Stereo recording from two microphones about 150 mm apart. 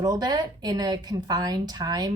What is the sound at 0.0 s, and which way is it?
A woman's voice, 25° right (ahead or behind).